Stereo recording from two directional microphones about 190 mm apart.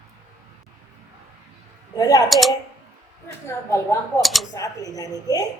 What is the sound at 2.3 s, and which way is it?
Speech, centre (ahead or behind).